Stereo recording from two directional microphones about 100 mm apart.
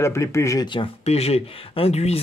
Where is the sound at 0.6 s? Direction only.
55° left (ahead or behind).